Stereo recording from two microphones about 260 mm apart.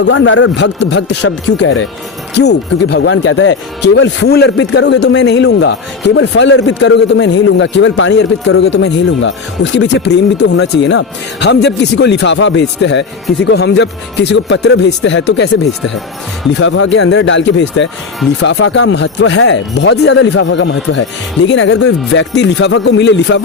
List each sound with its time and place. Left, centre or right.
0.0 s a man's voice: left
16.6 s speech: left